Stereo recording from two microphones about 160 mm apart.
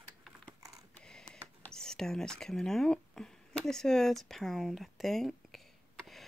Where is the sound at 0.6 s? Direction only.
20° right (ahead or behind).